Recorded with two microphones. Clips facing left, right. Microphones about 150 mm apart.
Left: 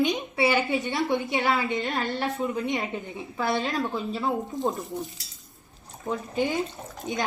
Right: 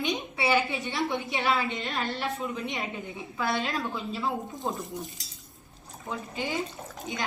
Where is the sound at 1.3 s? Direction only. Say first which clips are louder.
Left 2 dB; 25° left (ahead or behind).